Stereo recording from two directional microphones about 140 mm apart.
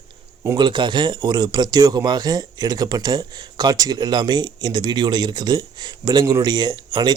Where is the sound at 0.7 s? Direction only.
35° right (ahead or behind).